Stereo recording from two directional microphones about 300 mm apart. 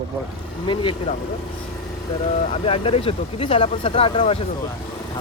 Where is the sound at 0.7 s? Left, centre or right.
Centre.